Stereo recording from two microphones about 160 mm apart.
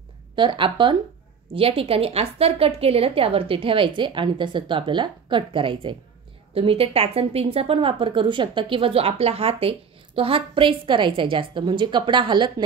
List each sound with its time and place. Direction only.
0.4 s a woman's voice: 30° right (ahead or behind)